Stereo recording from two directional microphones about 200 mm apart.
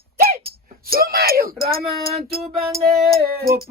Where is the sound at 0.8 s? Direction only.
50° right (ahead or behind).